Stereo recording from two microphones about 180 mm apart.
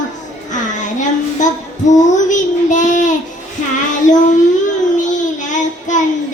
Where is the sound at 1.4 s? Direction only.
45° left (ahead or behind).